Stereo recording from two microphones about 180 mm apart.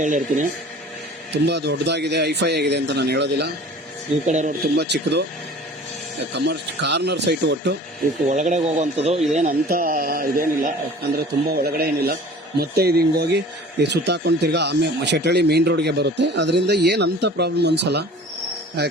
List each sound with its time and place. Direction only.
0.0 s a man's voice: 45° right (ahead or behind)
1.3 s speech: 70° right (ahead or behind)
4.3 s a man's voice: 40° right (ahead or behind)
4.8 s speech: 70° right (ahead or behind)
6.3 s speech: 70° right (ahead or behind)
8.3 s speech: 40° right (ahead or behind)
9.4 s a man's voice: 50° right (ahead or behind); by 18.9 s 65° right (ahead or behind)